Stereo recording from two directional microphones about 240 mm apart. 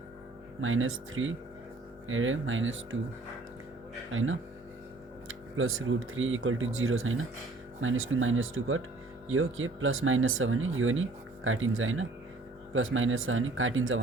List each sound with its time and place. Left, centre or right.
0.6 s speech: right
4.1 s speech: right